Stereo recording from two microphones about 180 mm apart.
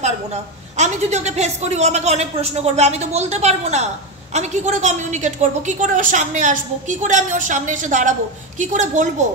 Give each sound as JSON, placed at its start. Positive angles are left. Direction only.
{"t": 0.7, "sound": "a woman's voice", "side_deg": -40}